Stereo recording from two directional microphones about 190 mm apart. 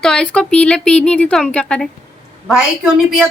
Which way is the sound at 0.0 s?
5° left (ahead or behind).